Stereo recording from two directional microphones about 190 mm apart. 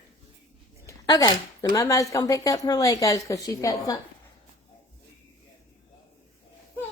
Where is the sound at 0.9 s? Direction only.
20° left (ahead or behind).